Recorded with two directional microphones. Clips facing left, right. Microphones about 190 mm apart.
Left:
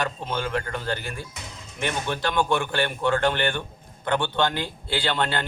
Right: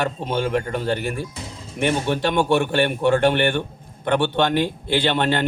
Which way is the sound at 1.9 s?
25° right (ahead or behind).